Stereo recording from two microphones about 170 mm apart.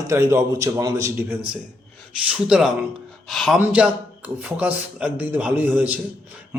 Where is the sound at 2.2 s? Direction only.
5° right (ahead or behind).